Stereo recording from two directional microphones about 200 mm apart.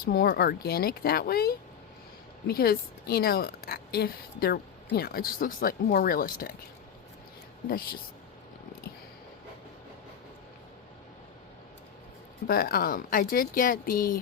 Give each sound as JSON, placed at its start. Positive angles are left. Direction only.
{"t": 0.0, "sound": "a woman's voice", "side_deg": 50}
{"t": 7.7, "sound": "a woman's voice", "side_deg": 45}
{"t": 12.5, "sound": "a woman's voice", "side_deg": 50}